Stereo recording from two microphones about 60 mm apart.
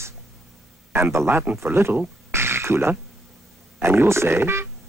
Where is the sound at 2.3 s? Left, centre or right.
Right.